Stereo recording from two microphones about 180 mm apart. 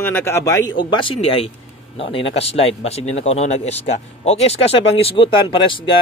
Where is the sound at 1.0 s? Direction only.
30° left (ahead or behind).